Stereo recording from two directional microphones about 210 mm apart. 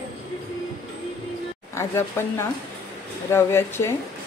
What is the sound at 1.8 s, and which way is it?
A woman's voice, 10° left (ahead or behind).